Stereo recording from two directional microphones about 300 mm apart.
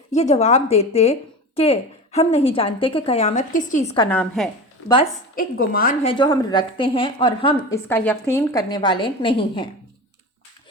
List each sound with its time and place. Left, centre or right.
0.1 s a woman's voice: left; by 4.4 s centre
5.3 s a woman's voice: left